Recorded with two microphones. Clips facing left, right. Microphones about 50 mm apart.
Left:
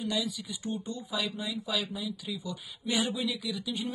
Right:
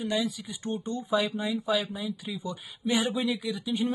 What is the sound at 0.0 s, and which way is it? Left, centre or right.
Speech, right.